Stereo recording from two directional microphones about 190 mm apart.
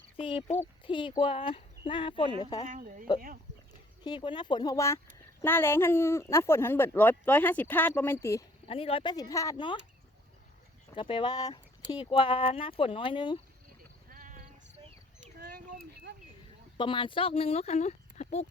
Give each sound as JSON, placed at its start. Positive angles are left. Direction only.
{"t": 0.2, "sound": "speech", "side_deg": 30}
{"t": 2.6, "sound": "speech", "side_deg": -45}
{"t": 4.0, "sound": "speech", "side_deg": 25}
{"t": 8.6, "sound": "speech", "side_deg": 30}
{"t": 10.9, "sound": "speech", "side_deg": 25}
{"t": 14.1, "sound": "clip-clop", "side_deg": -45}
{"t": 16.7, "sound": "speech", "side_deg": 25}